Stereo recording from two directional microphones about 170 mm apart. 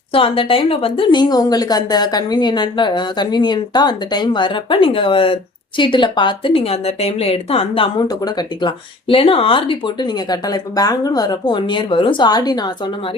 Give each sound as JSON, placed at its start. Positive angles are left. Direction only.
{"t": 0.1, "sound": "a woman's voice", "side_deg": 30}